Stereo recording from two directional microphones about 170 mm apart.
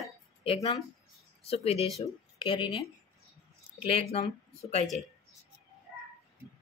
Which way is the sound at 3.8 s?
35° left (ahead or behind).